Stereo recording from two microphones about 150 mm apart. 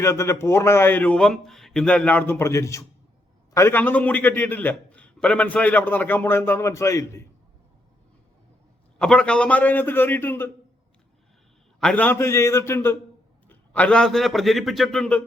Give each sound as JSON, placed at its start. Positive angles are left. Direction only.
{"t": 0.0, "sound": "a man's voice", "side_deg": 15}
{"t": 9.0, "sound": "a man's voice", "side_deg": 5}
{"t": 11.8, "sound": "a man's voice", "side_deg": 5}